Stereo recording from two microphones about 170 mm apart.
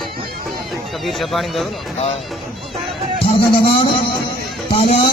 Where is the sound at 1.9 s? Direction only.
40° left (ahead or behind).